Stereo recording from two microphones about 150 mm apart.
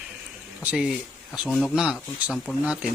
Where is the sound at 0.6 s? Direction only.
5° right (ahead or behind).